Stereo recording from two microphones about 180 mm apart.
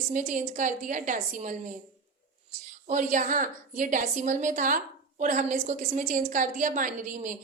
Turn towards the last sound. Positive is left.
turn(degrees=-45)  # may be behind; listen again after turning